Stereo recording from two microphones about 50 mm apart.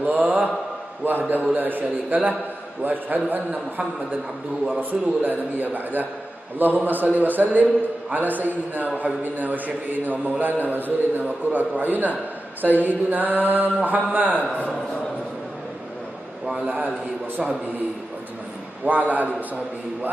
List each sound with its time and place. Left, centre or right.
0.0 s mantra: right
1.0 s a man's voice: right
16.5 s a man's voice: right
18.9 s a man's voice: right